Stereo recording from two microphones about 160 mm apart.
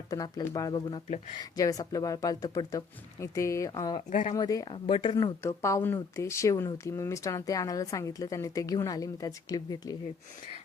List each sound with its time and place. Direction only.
0.1 s speech: 20° left (ahead or behind)
4.1 s speech: 50° left (ahead or behind)
4.4 s speech: 25° left (ahead or behind)
4.7 s speech: 35° left (ahead or behind)
5.1 s speech: 20° left (ahead or behind)